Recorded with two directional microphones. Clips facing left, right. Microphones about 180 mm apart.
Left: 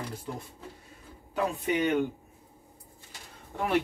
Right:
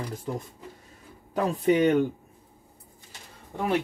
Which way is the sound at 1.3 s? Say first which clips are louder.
Right 6 dB; 40° right (ahead or behind).